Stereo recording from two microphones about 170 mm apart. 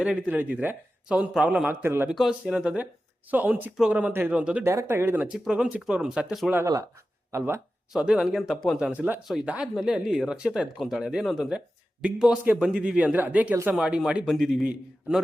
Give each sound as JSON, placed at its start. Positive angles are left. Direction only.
{"t": 0.0, "sound": "speech", "side_deg": -5}
{"t": 2.1, "sound": "speech", "side_deg": 0}
{"t": 6.5, "sound": "speech", "side_deg": -15}
{"t": 7.9, "sound": "speech", "side_deg": -5}